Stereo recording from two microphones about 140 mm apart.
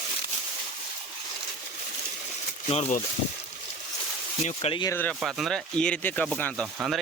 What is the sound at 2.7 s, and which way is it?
Speech, 50° left (ahead or behind).